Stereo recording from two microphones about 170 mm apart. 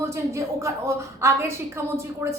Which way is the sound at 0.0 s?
15° right (ahead or behind).